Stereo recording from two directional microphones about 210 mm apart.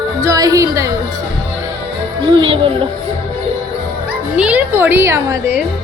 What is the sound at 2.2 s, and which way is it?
Music, 25° right (ahead or behind).